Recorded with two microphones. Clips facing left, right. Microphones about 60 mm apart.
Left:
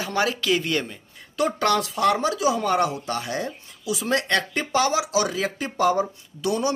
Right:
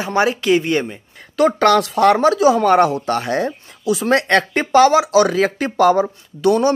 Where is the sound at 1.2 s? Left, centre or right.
Right.